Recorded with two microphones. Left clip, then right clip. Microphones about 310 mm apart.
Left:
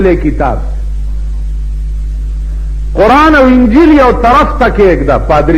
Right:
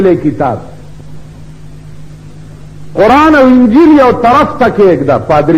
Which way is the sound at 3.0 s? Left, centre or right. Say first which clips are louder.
Even; left.